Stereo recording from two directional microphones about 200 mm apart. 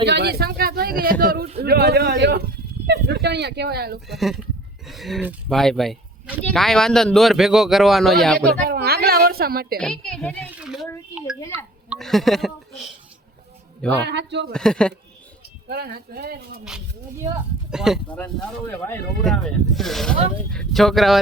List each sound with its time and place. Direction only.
0.0 s a woman's voice: 55° right (ahead or behind)
4.1 s speech: centre (ahead or behind)
8.4 s a woman's voice: 50° right (ahead or behind)
9.7 s speech: 5° left (ahead or behind)
11.9 s speech: centre (ahead or behind)
13.9 s speech: 60° right (ahead or behind)
14.5 s speech: 5° left (ahead or behind)
15.7 s speech: 55° right (ahead or behind)
17.7 s speech: 5° right (ahead or behind)
18.2 s speech: 10° left (ahead or behind)